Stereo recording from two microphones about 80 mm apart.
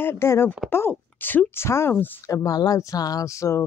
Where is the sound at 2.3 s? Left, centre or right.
Left.